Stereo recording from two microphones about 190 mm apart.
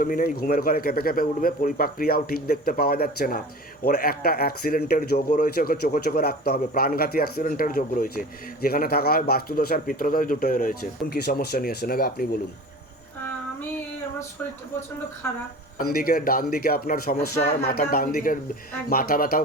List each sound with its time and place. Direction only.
0.0 s speech: 45° left (ahead or behind)
15.8 s speech: 50° left (ahead or behind)